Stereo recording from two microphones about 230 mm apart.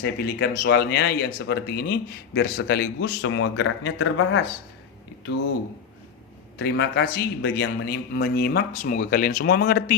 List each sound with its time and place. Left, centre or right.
0.0 s a man's voice: left
6.6 s a man's voice: left